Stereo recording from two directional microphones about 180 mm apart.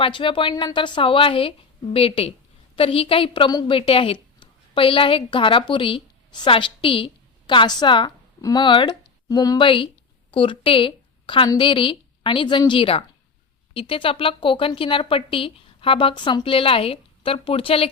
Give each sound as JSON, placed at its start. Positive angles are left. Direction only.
{"t": 0.0, "sound": "a woman's voice", "side_deg": 30}